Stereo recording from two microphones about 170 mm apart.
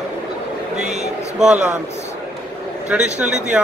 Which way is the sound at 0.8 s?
40° right (ahead or behind).